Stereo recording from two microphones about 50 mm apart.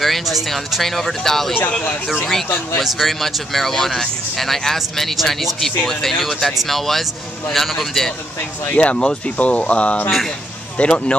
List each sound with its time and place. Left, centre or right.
0.0 s speech: centre
8.7 s speech: left